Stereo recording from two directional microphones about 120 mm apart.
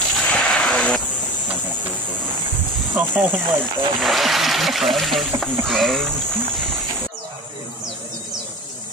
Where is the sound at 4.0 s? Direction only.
Centre (ahead or behind).